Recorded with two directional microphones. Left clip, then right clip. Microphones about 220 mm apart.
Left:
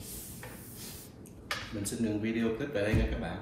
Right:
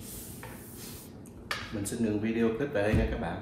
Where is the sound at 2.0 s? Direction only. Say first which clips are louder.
Right 3 dB; 15° right (ahead or behind).